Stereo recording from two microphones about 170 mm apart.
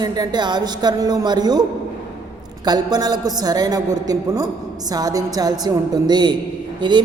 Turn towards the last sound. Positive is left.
turn(degrees=-25)  # may be behind; listen again after turning